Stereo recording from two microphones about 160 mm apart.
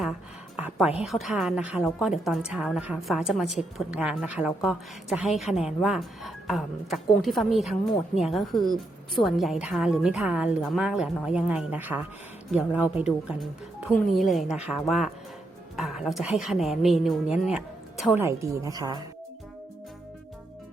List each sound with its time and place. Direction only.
0.5 s a woman's voice: 5° right (ahead or behind)
18.2 s a woman's voice: 15° right (ahead or behind)